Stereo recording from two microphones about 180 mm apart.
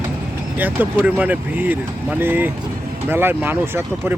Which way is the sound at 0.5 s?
10° right (ahead or behind).